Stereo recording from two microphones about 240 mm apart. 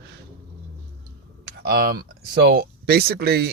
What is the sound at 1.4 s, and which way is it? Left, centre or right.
Speech, right.